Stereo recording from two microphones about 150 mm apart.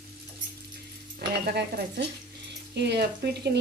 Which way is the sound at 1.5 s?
90° right.